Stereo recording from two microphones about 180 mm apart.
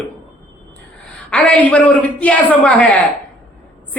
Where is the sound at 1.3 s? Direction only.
5° left (ahead or behind).